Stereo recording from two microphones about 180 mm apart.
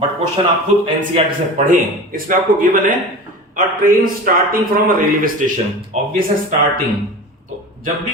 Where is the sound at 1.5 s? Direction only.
50° right (ahead or behind).